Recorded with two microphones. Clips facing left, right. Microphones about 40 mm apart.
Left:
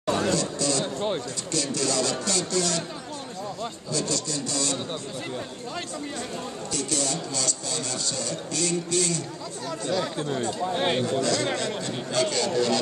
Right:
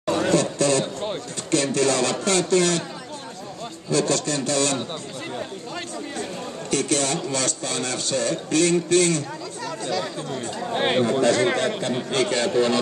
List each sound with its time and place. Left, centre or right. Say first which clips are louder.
0.2 s a sound: right 5 dB; right
1.5 s a man's voice: right 7 dB; right
3.9 s a man's voice: right 8 dB; right
6.7 s a man's voice: right 7 dB; right
10.7 s speech: right 6 dB; centre
11.1 s speech: right 6 dB; right